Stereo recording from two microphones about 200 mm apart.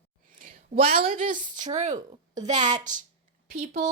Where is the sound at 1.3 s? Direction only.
40° right (ahead or behind).